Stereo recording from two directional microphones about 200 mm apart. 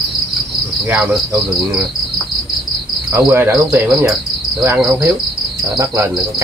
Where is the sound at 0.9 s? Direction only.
10° right (ahead or behind).